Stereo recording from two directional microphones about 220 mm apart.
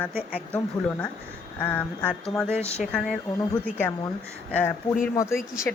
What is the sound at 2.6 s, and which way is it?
Speech, 30° left (ahead or behind).